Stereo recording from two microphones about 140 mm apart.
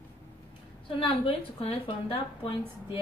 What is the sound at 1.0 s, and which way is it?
A woman's voice, 45° left (ahead or behind).